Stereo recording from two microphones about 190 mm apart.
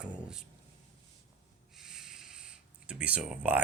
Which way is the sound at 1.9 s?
Centre (ahead or behind).